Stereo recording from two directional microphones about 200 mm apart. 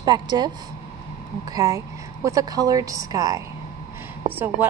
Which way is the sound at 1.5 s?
15° right (ahead or behind).